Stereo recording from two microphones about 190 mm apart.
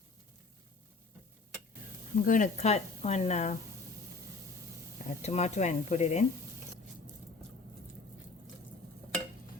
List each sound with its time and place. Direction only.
2.1 s speech: 45° left (ahead or behind)
5.0 s speech: 35° left (ahead or behind)